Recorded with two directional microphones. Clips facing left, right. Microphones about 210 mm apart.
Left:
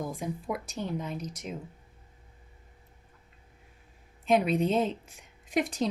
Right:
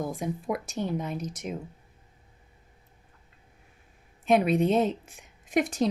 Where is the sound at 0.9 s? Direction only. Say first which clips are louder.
Right 3 dB; 55° right (ahead or behind).